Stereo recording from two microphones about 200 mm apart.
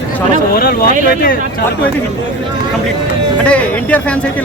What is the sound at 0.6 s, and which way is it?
Speech, 45° left (ahead or behind).